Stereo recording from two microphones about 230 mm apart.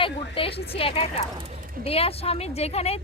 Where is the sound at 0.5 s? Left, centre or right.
Left.